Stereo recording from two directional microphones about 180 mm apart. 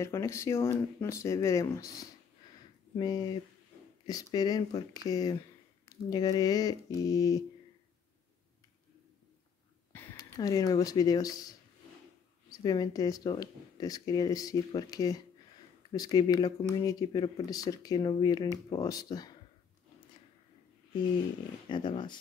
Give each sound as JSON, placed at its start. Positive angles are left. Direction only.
{"t": 0.0, "sound": "speech", "side_deg": 15}
{"t": 9.9, "sound": "speech", "side_deg": 20}
{"t": 21.6, "sound": "speech", "side_deg": 25}